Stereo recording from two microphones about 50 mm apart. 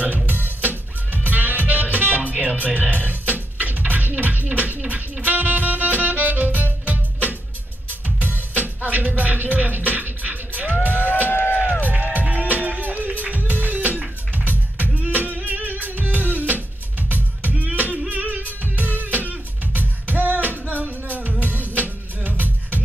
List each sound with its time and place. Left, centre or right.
0.3 s music: right
11.3 s music: left
11.8 s music: right